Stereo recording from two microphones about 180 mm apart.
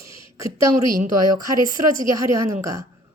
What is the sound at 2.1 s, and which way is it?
Speech, 15° right (ahead or behind).